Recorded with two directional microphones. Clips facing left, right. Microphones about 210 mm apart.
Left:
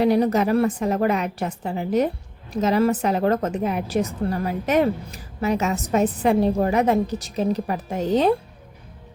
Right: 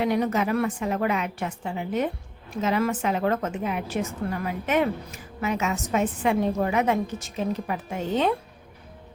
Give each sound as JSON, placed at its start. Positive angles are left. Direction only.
{"t": 0.0, "sound": "a woman's voice", "side_deg": 35}